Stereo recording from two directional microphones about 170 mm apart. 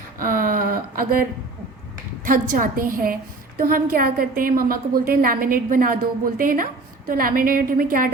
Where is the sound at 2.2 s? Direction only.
50° right (ahead or behind).